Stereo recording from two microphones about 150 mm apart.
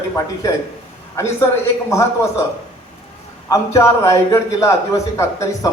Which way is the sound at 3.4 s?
20° left (ahead or behind).